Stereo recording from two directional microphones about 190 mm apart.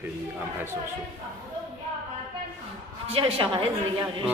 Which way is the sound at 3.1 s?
30° right (ahead or behind).